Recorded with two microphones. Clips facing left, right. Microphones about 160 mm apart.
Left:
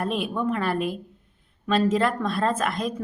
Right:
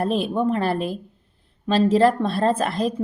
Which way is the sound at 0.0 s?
30° right (ahead or behind).